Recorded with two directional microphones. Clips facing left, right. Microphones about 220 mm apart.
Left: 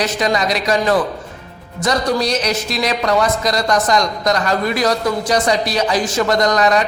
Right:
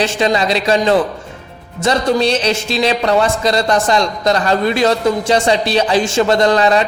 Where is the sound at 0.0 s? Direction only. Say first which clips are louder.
Right 3 dB; 30° right (ahead or behind).